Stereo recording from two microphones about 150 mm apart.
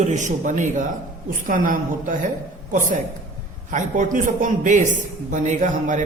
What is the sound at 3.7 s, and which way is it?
A woman's voice, 60° right (ahead or behind).